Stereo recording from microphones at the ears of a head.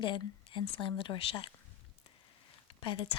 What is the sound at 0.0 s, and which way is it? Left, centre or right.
A woman's voice, left.